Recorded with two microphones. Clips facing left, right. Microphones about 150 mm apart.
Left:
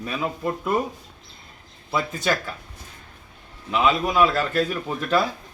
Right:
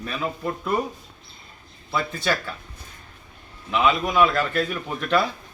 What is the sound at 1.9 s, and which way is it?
Speech, 20° left (ahead or behind).